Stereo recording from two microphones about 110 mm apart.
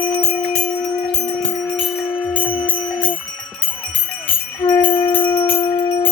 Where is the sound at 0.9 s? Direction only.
40° left (ahead or behind).